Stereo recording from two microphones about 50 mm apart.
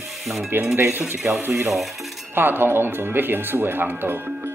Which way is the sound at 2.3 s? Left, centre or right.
Right.